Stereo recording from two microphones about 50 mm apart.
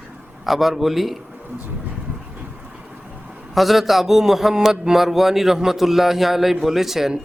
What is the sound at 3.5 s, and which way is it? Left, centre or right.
A man's voice, centre.